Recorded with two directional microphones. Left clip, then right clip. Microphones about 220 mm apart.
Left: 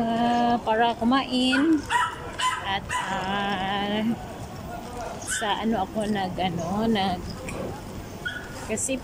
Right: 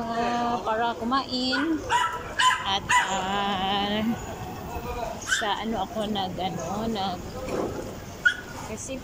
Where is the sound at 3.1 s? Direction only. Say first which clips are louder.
Right 1 dB; centre (ahead or behind).